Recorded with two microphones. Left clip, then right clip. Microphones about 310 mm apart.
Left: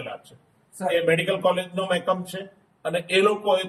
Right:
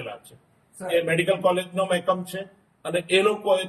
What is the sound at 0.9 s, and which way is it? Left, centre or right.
A man's voice, centre.